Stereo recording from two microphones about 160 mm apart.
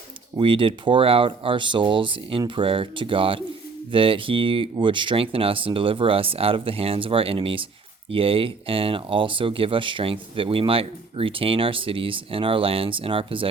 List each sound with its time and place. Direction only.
0.3 s speech: 35° right (ahead or behind)